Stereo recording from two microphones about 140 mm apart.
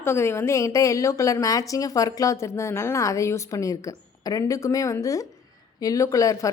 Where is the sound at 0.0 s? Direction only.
20° left (ahead or behind).